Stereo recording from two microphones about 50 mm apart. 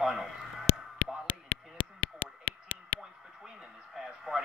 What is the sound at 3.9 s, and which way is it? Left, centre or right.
Radio, centre.